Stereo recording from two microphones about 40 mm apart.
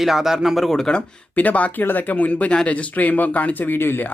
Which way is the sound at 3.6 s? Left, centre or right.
Left.